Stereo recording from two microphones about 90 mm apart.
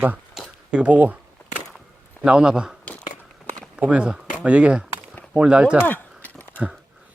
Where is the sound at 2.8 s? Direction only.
15° left (ahead or behind).